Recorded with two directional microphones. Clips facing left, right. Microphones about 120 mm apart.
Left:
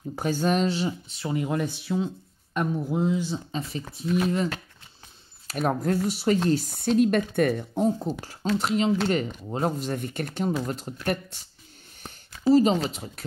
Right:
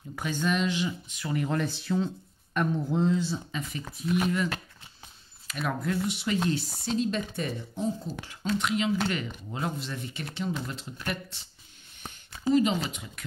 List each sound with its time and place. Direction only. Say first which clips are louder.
0.1 s speech: left 4 dB; 40° left (ahead or behind)
1.3 s speech: left 2 dB; 15° left (ahead or behind)
4.0 s speech: left 2 dB; 25° left (ahead or behind)
5.5 s speech: left 5 dB; 40° left (ahead or behind)
7.0 s speech: left 9 dB; 55° left (ahead or behind)
8.2 s speech: left 3 dB; 40° left (ahead or behind)